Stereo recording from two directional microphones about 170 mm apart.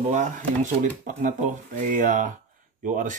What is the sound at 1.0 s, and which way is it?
Speech, 45° right (ahead or behind).